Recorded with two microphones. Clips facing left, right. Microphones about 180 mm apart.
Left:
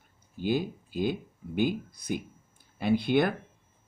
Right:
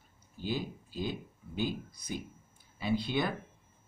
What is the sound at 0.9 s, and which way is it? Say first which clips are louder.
Speech: left 7 dB; 65° left (ahead or behind).